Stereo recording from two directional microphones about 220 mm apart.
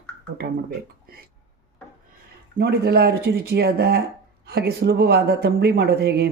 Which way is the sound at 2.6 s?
45° right (ahead or behind).